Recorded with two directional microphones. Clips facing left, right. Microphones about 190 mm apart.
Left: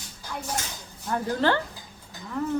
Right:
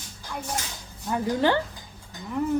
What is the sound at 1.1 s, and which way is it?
Speech, 15° right (ahead or behind).